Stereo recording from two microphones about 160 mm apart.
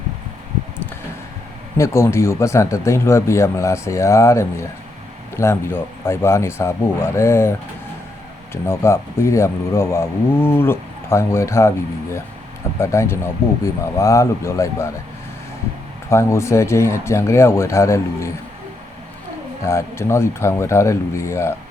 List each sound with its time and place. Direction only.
1.8 s speech: 15° left (ahead or behind)
8.6 s speech: 15° left (ahead or behind)
12.8 s speech: 15° left (ahead or behind)
16.0 s speech: 15° left (ahead or behind)
19.6 s speech: 15° left (ahead or behind)